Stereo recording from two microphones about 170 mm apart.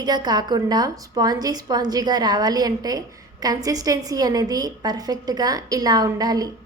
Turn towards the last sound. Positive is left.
turn(degrees=-20)  # may be behind; listen again after turning